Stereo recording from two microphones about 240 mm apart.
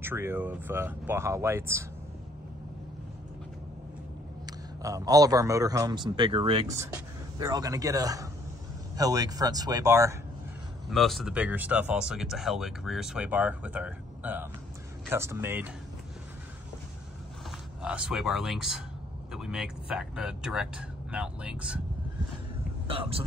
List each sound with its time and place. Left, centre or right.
0.0 s a man's voice: centre
4.5 s a man's voice: centre
10.9 s a man's voice: centre
17.5 s speech: centre
22.8 s speech: right